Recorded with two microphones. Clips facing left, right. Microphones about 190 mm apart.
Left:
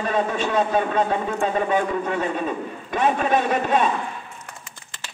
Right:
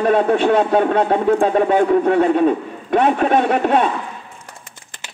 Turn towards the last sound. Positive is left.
turn(degrees=-60)  # may be behind; listen again after turning